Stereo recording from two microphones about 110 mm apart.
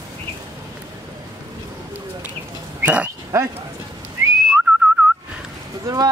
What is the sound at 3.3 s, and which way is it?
Speech, 25° right (ahead or behind).